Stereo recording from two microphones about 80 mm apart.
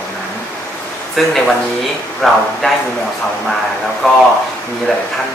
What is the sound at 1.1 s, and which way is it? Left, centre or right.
Speech, centre.